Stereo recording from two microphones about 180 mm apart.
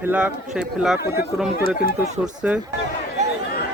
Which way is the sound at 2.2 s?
5° right (ahead or behind).